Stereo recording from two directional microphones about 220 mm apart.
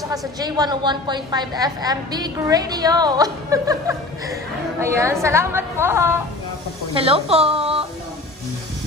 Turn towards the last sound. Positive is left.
turn(degrees=-25)  # may be behind; listen again after turning